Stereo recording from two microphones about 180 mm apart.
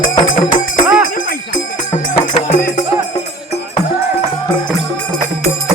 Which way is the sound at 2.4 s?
45° left (ahead or behind).